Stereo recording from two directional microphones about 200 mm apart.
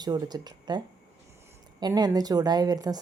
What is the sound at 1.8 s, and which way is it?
A woman's voice, 20° right (ahead or behind).